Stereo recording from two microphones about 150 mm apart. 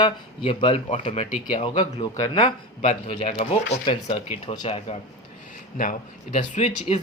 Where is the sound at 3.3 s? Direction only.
40° left (ahead or behind).